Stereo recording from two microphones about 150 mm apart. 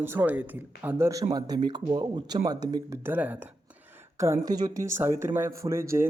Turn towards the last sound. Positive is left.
turn(degrees=-15)  # may be behind; listen again after turning